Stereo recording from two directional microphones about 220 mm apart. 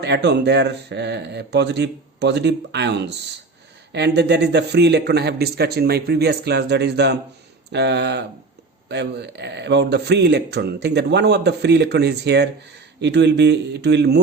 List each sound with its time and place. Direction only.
0.0 s a man's voice: 50° right (ahead or behind)